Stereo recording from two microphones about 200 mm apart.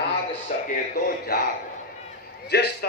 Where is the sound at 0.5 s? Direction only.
35° left (ahead or behind).